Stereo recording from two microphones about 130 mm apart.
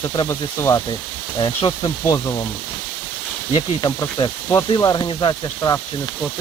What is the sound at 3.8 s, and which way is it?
Speech, 35° left (ahead or behind).